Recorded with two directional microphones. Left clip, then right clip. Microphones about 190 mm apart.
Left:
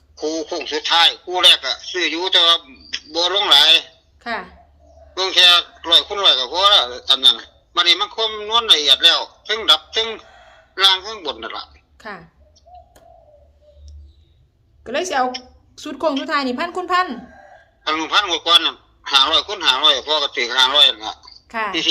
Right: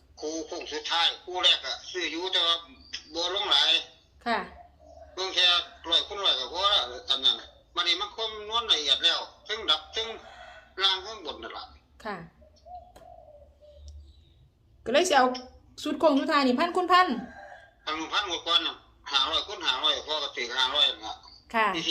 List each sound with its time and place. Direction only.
0.2 s a man's voice: 65° left (ahead or behind)
4.2 s speech: 5° left (ahead or behind)
5.1 s a man's voice: 60° left (ahead or behind)
11.9 s a woman's voice: 10° left (ahead or behind)
14.8 s a woman's voice: centre (ahead or behind)
15.7 s a woman's voice: 15° left (ahead or behind)
17.8 s a man's voice: 60° left (ahead or behind)
21.5 s a woman's voice: centre (ahead or behind)